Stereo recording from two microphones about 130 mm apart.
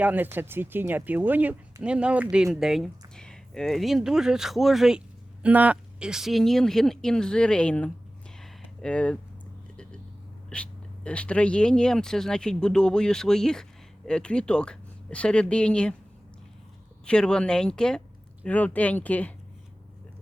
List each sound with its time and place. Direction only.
0.0 s speech: 15° right (ahead or behind); by 7.9 s 10° left (ahead or behind)
8.4 s a sound: 5° left (ahead or behind)
10.5 s speech: 10° left (ahead or behind)
17.1 s speech: 5° left (ahead or behind)